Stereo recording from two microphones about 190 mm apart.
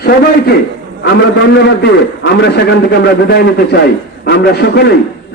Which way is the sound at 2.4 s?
60° left (ahead or behind).